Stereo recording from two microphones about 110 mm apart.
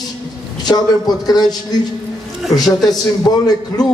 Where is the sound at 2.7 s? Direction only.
Centre (ahead or behind).